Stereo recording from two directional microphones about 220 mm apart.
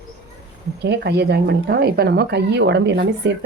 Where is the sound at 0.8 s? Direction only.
50° right (ahead or behind).